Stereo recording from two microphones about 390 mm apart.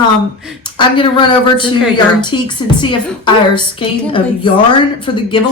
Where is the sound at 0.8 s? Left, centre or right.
Centre.